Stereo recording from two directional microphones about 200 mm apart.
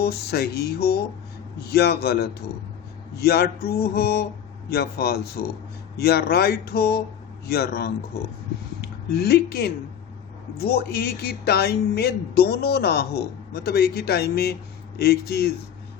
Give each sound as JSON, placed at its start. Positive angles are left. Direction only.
{"t": 0.0, "sound": "speech", "side_deg": 50}